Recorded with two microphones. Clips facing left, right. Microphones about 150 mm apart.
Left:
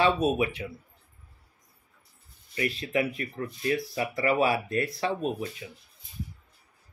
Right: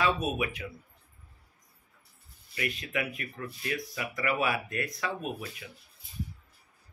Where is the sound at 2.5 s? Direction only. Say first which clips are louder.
Left 6 dB; 30° left (ahead or behind).